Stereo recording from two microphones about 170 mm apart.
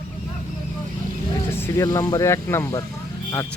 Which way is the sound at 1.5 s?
15° left (ahead or behind).